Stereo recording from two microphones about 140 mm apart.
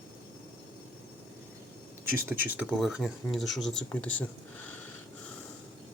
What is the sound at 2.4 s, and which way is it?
Speech, 15° right (ahead or behind).